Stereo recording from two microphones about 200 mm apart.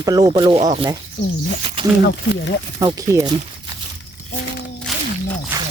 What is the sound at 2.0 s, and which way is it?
Speech, 60° left (ahead or behind).